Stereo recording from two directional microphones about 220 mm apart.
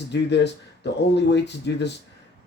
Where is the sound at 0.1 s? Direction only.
50° left (ahead or behind).